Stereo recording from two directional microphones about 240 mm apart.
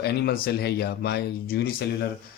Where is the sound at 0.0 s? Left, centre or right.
Left.